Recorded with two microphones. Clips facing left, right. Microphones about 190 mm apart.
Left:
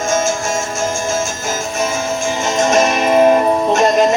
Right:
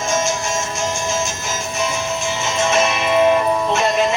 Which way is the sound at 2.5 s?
45° left (ahead or behind).